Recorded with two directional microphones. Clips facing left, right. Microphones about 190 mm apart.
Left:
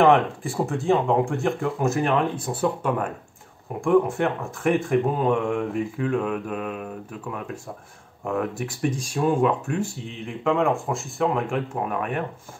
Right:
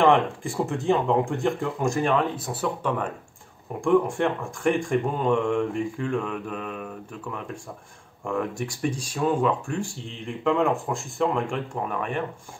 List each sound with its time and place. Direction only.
0.0 s speech: 5° left (ahead or behind)
2.3 s speech: 25° left (ahead or behind)
3.8 s speech: 5° left (ahead or behind)